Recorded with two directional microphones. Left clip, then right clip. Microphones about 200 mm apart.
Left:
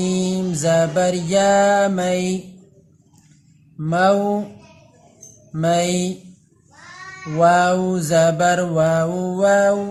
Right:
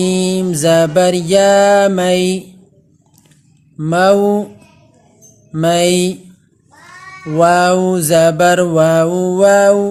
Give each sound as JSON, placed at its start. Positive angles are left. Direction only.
{"t": 0.0, "sound": "mantra", "side_deg": -45}
{"t": 3.8, "sound": "mantra", "side_deg": -50}
{"t": 5.5, "sound": "mantra", "side_deg": -45}
{"t": 7.3, "sound": "mantra", "side_deg": -50}